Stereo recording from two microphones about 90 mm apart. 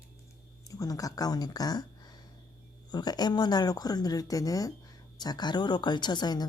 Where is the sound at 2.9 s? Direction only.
50° left (ahead or behind).